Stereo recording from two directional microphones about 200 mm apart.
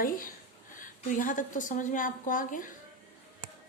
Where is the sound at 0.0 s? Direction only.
45° left (ahead or behind).